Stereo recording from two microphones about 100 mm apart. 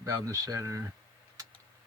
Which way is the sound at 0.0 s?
35° right (ahead or behind).